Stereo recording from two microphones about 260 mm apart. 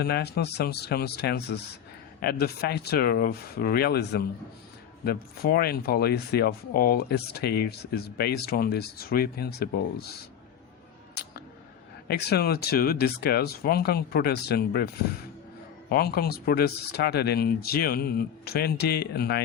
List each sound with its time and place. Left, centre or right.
0.0 s speech: left
12.0 s speech: left